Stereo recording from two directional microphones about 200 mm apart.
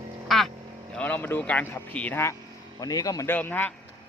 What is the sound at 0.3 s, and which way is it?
Vehicle, centre (ahead or behind).